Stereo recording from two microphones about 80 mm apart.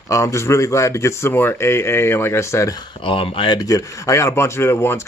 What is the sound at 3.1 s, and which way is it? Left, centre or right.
Speech, left.